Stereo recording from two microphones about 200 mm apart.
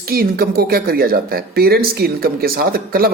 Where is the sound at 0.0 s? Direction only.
50° right (ahead or behind).